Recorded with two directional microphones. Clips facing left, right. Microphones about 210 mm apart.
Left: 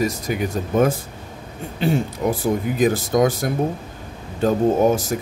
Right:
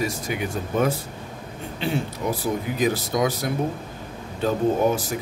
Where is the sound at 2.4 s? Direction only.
50° left (ahead or behind).